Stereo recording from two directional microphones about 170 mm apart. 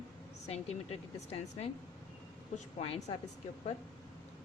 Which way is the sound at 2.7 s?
35° left (ahead or behind).